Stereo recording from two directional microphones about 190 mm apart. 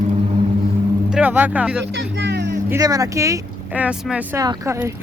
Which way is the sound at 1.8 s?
65° right (ahead or behind).